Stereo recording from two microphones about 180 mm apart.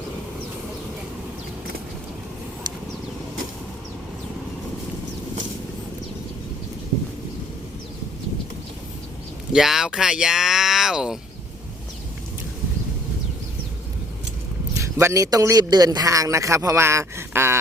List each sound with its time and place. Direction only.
9.5 s speech: 5° right (ahead or behind)
14.9 s a man's voice: 20° right (ahead or behind)